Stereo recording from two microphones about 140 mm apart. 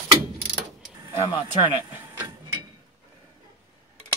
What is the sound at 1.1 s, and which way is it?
Speech, 45° left (ahead or behind).